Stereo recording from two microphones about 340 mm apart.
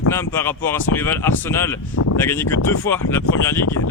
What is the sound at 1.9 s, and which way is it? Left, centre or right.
Speech, left.